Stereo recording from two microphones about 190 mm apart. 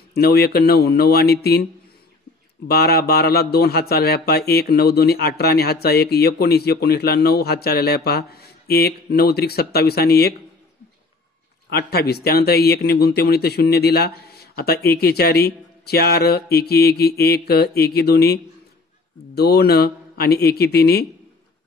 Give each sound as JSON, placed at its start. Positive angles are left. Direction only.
{"t": 0.1, "sound": "speech", "side_deg": 55}
{"t": 2.7, "sound": "speech", "side_deg": 55}
{"t": 11.7, "sound": "speech", "side_deg": 55}